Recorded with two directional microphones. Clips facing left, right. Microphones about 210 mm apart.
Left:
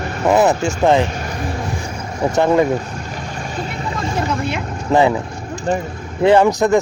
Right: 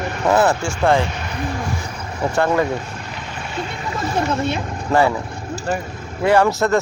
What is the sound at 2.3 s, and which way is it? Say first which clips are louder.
Speech: left 4 dB; 20° left (ahead or behind).